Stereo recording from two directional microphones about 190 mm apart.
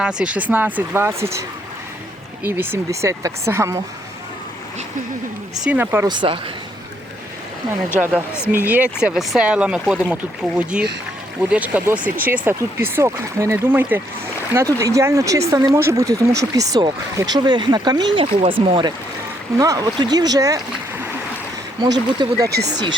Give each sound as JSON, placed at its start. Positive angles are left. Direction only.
{"t": 0.0, "sound": "speech", "side_deg": -5}
{"t": 2.5, "sound": "speech", "side_deg": -10}
{"t": 5.5, "sound": "speech", "side_deg": -5}
{"t": 6.1, "sound": "speech", "side_deg": -25}
{"t": 7.9, "sound": "speech", "side_deg": -5}
{"t": 21.8, "sound": "speech", "side_deg": -20}
{"t": 22.4, "sound": "speech", "side_deg": -60}